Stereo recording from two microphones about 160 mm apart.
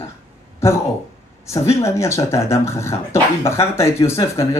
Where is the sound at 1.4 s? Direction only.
15° left (ahead or behind).